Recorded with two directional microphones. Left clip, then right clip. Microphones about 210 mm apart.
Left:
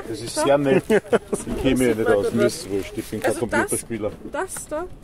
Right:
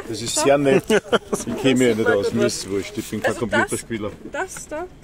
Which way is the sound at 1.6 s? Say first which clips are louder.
Right 3 dB; 40° right (ahead or behind).